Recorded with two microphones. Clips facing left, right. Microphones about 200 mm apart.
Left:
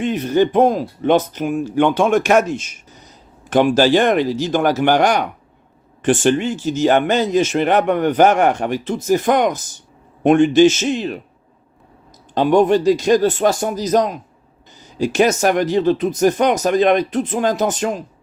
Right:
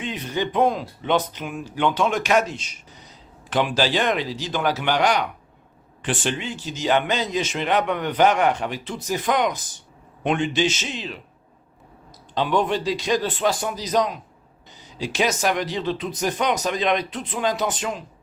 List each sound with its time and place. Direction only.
0.0 s speech: 45° left (ahead or behind)
12.3 s speech: 45° left (ahead or behind)